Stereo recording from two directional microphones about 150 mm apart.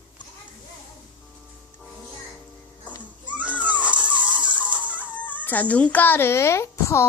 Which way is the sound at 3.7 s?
10° right (ahead or behind).